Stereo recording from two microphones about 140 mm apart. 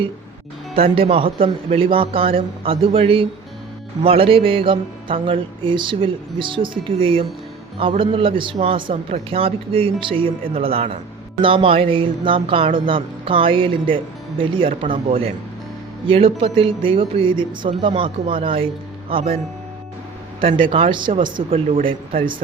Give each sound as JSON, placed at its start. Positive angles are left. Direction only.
{"t": 0.8, "sound": "a man's voice", "side_deg": -45}
{"t": 20.6, "sound": "a man's voice", "side_deg": -40}